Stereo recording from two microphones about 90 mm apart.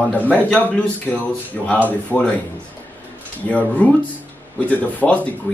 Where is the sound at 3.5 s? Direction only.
15° left (ahead or behind).